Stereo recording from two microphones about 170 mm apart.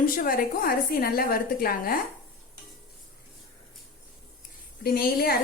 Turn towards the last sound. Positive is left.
turn(degrees=60)  # may be behind; listen again after turning